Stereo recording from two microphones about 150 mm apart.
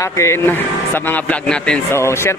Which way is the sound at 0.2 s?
20° left (ahead or behind).